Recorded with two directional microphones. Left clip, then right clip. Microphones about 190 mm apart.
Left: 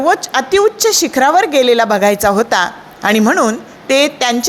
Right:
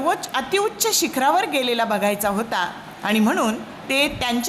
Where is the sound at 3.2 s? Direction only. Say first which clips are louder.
Left 7 dB; 25° left (ahead or behind).